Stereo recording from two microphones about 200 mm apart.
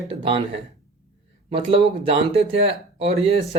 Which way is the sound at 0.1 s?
25° right (ahead or behind).